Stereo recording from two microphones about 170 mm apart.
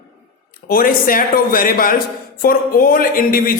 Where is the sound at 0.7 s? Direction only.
55° left (ahead or behind).